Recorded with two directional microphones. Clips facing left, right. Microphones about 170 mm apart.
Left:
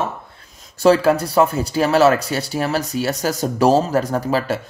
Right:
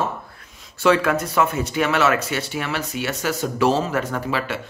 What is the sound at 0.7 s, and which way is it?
Speech, 35° left (ahead or behind).